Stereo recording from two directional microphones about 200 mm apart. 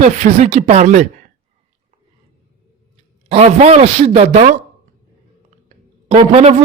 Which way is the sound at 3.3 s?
30° right (ahead or behind).